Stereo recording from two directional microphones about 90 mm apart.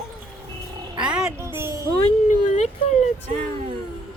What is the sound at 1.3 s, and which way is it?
Music, 30° right (ahead or behind).